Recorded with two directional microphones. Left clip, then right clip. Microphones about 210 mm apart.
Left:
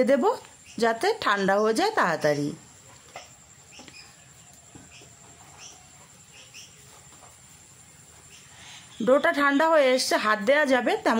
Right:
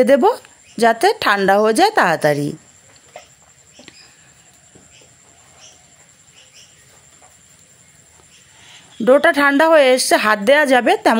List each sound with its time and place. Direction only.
0.0 s speech: 30° right (ahead or behind)
9.0 s speech: 30° right (ahead or behind)